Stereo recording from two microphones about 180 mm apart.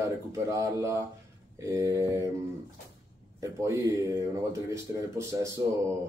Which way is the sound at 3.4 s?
15° right (ahead or behind).